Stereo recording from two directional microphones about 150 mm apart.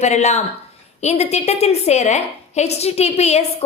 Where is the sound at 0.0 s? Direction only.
50° left (ahead or behind).